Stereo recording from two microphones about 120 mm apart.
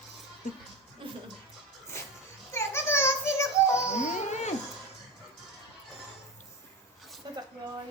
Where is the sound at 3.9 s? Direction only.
75° left (ahead or behind).